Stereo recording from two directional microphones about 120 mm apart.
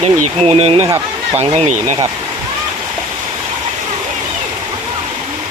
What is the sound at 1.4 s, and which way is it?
Speech, 70° right (ahead or behind).